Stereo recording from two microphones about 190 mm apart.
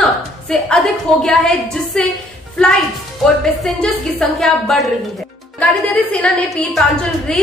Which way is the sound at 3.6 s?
Centre (ahead or behind).